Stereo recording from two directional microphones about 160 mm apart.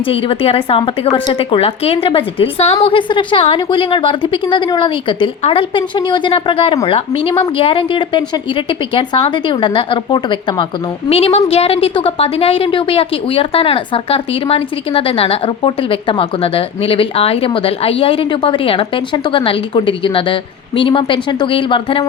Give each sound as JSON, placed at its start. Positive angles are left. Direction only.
{"t": 0.0, "sound": "a woman's voice", "side_deg": 35}